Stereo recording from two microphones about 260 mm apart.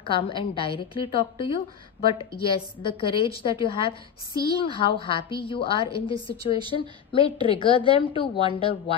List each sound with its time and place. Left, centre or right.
0.0 s a woman's voice: centre